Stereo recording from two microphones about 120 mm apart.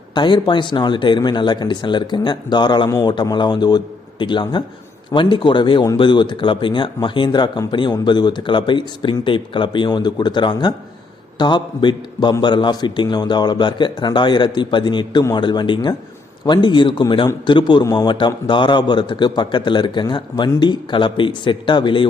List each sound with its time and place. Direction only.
0.1 s a man's voice: 40° left (ahead or behind)